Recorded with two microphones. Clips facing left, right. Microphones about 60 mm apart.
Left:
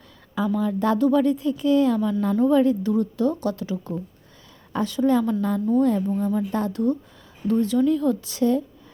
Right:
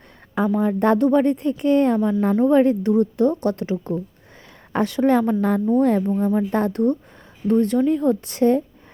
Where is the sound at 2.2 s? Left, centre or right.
Right.